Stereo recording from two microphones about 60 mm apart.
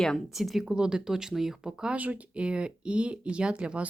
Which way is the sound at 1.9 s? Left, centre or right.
Right.